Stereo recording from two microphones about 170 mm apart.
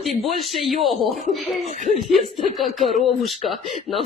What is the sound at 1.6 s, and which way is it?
Speech, 45° right (ahead or behind).